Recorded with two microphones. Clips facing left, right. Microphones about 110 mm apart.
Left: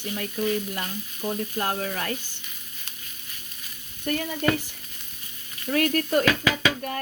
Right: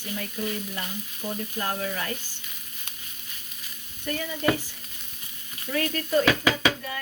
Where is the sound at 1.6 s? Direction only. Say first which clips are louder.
Even; 45° left (ahead or behind).